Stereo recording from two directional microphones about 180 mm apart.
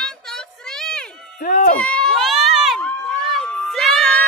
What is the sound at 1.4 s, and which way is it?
Speech, 55° left (ahead or behind).